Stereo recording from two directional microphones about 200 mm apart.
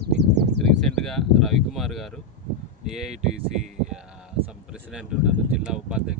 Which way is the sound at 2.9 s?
Centre (ahead or behind).